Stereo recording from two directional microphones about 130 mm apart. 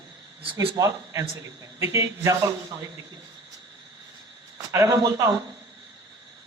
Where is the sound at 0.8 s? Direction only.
25° right (ahead or behind).